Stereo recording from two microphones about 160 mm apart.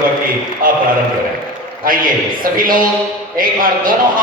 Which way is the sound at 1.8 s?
60° right (ahead or behind).